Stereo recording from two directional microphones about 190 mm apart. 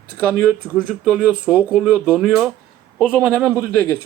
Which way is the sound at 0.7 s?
5° right (ahead or behind).